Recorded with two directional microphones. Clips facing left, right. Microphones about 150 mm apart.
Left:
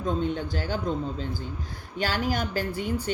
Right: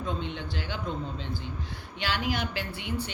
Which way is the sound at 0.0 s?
45° left (ahead or behind).